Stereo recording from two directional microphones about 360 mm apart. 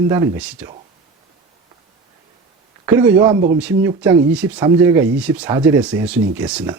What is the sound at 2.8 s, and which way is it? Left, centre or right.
Speech, centre.